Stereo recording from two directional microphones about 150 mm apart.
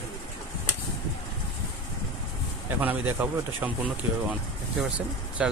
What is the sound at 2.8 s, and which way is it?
Speech, 10° right (ahead or behind).